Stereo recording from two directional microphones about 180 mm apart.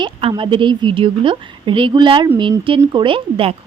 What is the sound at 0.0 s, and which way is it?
Speech, 30° right (ahead or behind).